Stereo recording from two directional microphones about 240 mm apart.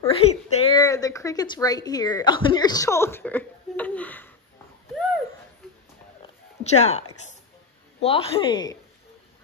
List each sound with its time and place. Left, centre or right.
0.0 s a woman's voice: left; by 4.3 s centre
6.2 s a sound: left
8.0 s a woman's voice: left